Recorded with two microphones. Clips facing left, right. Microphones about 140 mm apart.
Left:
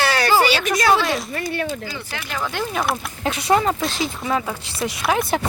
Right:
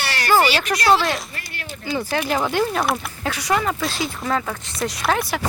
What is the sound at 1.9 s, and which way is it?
Speech, 35° right (ahead or behind).